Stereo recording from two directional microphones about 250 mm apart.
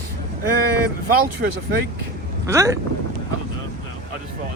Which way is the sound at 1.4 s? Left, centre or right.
Right.